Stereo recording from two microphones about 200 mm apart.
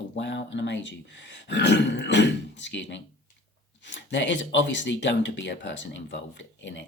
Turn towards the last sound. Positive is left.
turn(degrees=65)  # may be behind; listen again after turning